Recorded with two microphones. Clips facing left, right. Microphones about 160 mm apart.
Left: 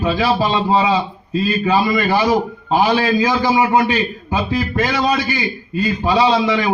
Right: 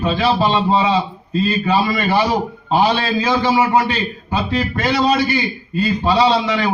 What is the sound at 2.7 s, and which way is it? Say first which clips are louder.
A man's voice: left 1 dB; 15° left (ahead or behind).